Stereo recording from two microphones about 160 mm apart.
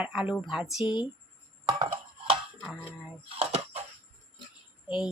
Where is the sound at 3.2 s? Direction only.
40° right (ahead or behind).